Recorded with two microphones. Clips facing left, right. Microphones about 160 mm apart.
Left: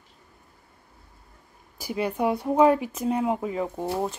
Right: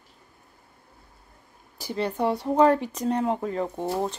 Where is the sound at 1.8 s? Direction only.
10° left (ahead or behind).